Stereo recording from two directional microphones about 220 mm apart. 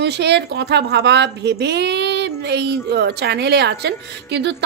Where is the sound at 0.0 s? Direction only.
50° right (ahead or behind).